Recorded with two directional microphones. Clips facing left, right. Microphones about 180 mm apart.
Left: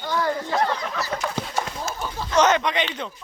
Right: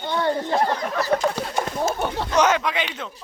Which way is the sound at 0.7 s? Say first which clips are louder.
Right 5 dB; 45° right (ahead or behind).